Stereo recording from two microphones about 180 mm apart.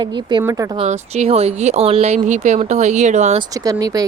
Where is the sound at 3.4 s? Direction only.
20° right (ahead or behind).